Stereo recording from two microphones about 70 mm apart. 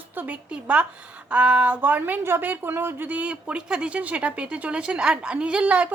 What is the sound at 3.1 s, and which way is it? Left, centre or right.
Speech, right.